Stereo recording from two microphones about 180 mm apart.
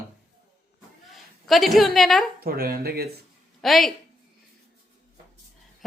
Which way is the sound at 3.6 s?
Centre (ahead or behind).